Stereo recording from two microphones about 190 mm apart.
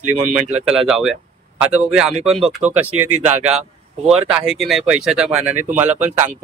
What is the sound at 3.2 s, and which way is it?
Speech, 40° right (ahead or behind).